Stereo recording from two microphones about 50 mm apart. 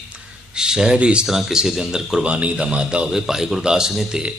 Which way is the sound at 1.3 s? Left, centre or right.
Centre.